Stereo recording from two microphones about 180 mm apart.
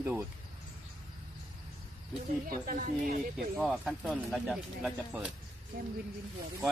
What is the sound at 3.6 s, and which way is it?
Speech, centre (ahead or behind).